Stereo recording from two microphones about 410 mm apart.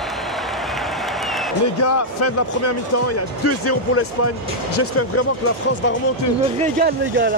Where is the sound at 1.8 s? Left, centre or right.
Left.